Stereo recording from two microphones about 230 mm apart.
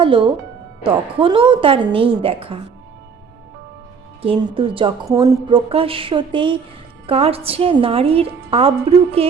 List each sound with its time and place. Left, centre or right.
0.0 s a woman's voice: right
4.2 s a woman's voice: right